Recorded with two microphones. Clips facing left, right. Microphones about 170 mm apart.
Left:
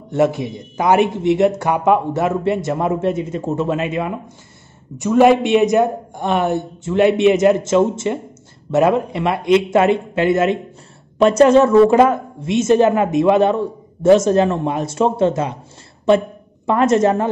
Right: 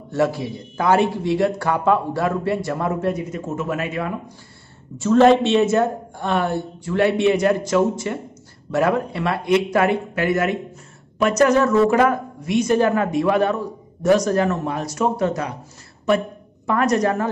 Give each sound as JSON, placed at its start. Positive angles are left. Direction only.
{"t": 0.1, "sound": "a woman's voice", "side_deg": 20}
{"t": 16.6, "sound": "a woman's voice", "side_deg": 25}